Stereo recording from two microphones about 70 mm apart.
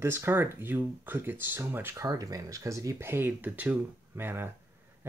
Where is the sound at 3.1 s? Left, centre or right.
Right.